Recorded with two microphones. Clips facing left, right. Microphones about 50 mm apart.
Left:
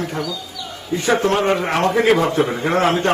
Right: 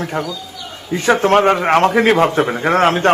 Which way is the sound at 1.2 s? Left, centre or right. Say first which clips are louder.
Right 5 dB; right.